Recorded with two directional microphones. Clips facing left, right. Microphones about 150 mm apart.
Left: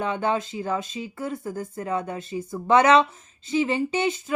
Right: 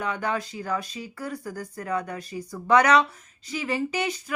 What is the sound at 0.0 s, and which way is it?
A woman's voice, 25° left (ahead or behind).